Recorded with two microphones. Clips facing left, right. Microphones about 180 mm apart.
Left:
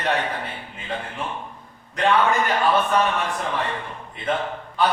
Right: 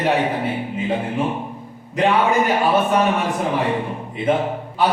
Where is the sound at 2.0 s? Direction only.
15° right (ahead or behind).